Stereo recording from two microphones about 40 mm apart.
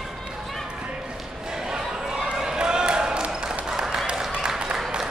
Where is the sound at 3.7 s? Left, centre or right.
Centre.